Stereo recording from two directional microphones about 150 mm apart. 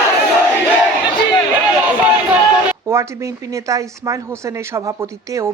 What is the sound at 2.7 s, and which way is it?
A woman's voice, 20° right (ahead or behind).